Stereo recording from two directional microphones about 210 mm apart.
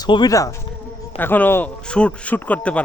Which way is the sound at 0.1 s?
20° left (ahead or behind).